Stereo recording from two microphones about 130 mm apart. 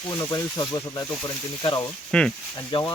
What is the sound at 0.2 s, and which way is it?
Speech, 20° left (ahead or behind).